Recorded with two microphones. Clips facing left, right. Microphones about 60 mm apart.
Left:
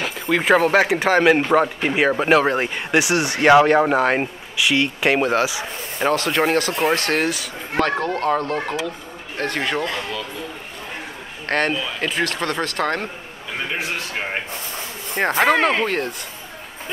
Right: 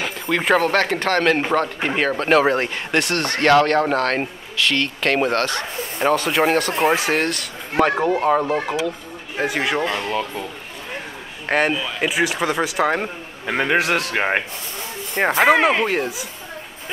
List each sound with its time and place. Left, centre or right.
0.0 s speech: centre
7.8 s speech: centre
11.4 s speech: centre
13.5 s a man's voice: right
15.1 s speech: centre